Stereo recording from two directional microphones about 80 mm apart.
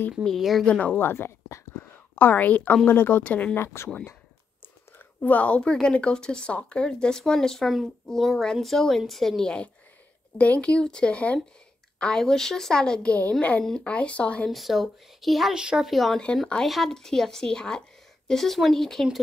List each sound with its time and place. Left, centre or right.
0.2 s speech: centre
0.7 s a woman's voice: centre
1.0 s a sound: left
3.0 s speech: left
3.5 s speech: left
4.9 s a woman's voice: centre
14.5 s speech: centre